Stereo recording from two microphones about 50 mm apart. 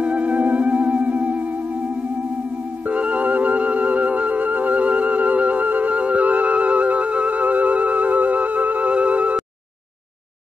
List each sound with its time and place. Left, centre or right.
0.0 s music: right
2.8 s music: right